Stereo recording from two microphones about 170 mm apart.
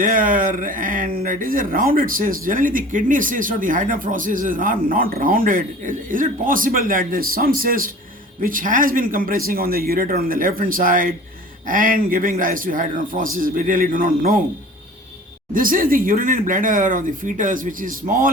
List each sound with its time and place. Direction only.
0.0 s speech: 55° right (ahead or behind)
15.5 s speech: 55° right (ahead or behind)